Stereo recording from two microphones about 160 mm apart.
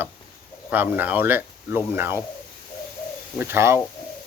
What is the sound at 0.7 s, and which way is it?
Speech, 10° right (ahead or behind).